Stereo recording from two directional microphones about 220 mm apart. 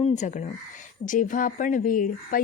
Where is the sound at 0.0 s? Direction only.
30° left (ahead or behind).